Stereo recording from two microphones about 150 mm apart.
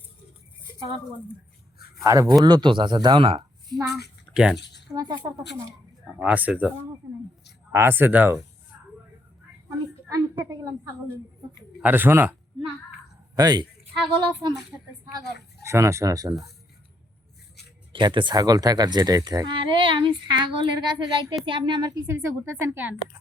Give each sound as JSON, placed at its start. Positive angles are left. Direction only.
{"t": 2.0, "sound": "speech", "side_deg": -20}
{"t": 4.3, "sound": "a sound", "side_deg": 10}
{"t": 4.9, "sound": "speech", "side_deg": -25}
{"t": 6.1, "sound": "speech", "side_deg": -10}
{"t": 7.7, "sound": "speech", "side_deg": -15}
{"t": 9.6, "sound": "a sound", "side_deg": -25}
{"t": 10.5, "sound": "speech", "side_deg": -25}
{"t": 11.8, "sound": "speech", "side_deg": -15}
{"t": 13.3, "sound": "speech", "side_deg": -25}
{"t": 15.2, "sound": "speech", "side_deg": 90}
{"t": 15.6, "sound": "speech", "side_deg": -20}
{"t": 17.9, "sound": "speech", "side_deg": -30}